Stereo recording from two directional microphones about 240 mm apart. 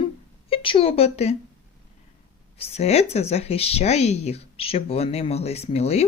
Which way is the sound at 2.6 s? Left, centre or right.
Left.